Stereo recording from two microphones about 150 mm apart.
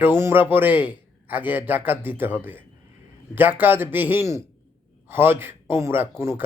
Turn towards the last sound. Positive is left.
turn(degrees=-15)  # may be behind; listen again after turning